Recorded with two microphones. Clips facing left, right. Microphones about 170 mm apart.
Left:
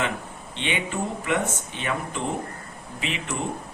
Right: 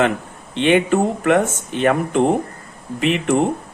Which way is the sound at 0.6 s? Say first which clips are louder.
Right 13 dB; 60° right (ahead or behind).